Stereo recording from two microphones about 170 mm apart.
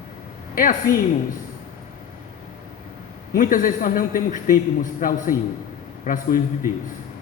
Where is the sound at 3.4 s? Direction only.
55° left (ahead or behind).